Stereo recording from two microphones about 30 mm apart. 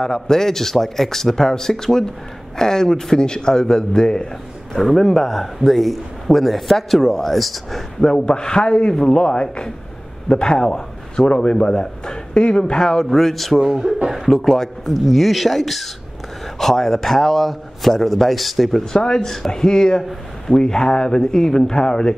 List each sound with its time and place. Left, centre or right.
0.0 s a man's voice: centre
4.7 s a man's voice: centre
8.0 s a man's voice: left
12.7 s a man's voice: centre
13.6 s speech: centre
14.1 s a man's voice: centre
18.9 s a man's voice: left
19.2 s a man's voice: centre